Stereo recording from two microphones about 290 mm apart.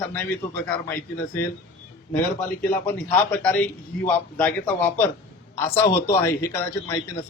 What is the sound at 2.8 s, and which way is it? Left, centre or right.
A man's voice, centre.